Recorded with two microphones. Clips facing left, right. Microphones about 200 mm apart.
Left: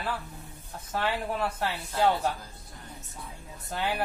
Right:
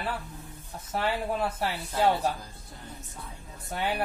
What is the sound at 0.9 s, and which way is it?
Speech, 10° right (ahead or behind).